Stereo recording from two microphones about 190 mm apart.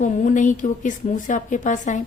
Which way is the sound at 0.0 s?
40° left (ahead or behind).